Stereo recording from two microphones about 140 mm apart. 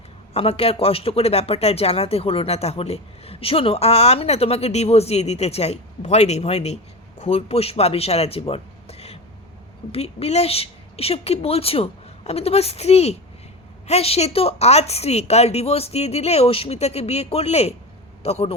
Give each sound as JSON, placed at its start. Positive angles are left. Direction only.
{"t": 0.3, "sound": "a man's voice", "side_deg": 45}